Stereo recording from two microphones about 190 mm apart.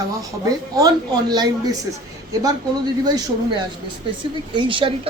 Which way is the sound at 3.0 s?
20° right (ahead or behind).